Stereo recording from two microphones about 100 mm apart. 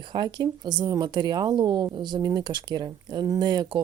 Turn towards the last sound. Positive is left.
turn(degrees=-45)  # may be behind; listen again after turning